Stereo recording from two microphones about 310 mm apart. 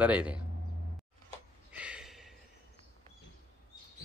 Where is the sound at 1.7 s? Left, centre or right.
Centre.